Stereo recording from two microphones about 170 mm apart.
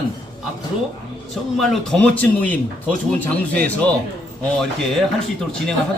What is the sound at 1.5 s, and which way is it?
A man's voice, centre (ahead or behind).